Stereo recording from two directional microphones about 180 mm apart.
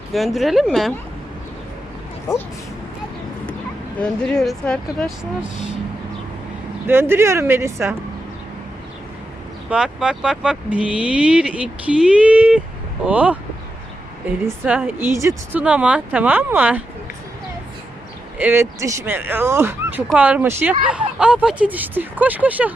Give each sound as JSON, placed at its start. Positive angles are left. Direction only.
{"t": 0.1, "sound": "speech", "side_deg": 0}
{"t": 2.3, "sound": "speech", "side_deg": 20}
{"t": 3.9, "sound": "speech", "side_deg": 5}
{"t": 6.8, "sound": "speech", "side_deg": -10}
{"t": 9.6, "sound": "speech", "side_deg": -5}
{"t": 14.4, "sound": "speech", "side_deg": -10}
{"t": 18.3, "sound": "speech", "side_deg": -10}